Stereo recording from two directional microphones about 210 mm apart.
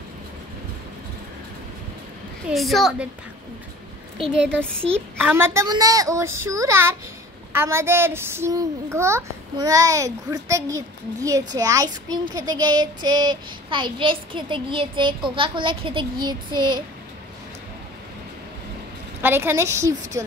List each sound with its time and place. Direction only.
2.4 s a woman's voice: centre (ahead or behind)
5.2 s a child's voice: 10° right (ahead or behind)
11.5 s child singing: 15° right (ahead or behind)
19.2 s a child's voice: 10° right (ahead or behind)